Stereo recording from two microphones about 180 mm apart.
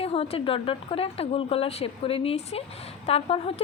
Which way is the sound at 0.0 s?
35° left (ahead or behind).